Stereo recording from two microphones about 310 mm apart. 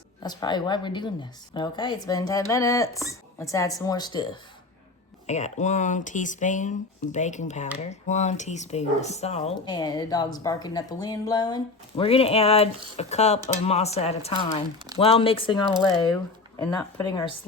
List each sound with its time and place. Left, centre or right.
0.2 s a woman's voice: centre
16.6 s a woman's voice: centre